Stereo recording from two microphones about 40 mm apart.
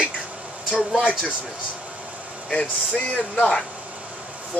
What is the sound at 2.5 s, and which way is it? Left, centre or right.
Speech, left.